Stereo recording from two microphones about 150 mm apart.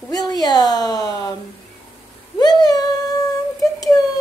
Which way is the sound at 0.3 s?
25° left (ahead or behind).